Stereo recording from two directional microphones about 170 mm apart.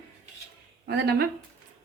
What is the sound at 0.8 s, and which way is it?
Speech, 70° right (ahead or behind).